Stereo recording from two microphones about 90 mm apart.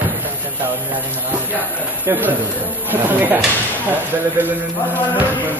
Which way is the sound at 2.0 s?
20° right (ahead or behind).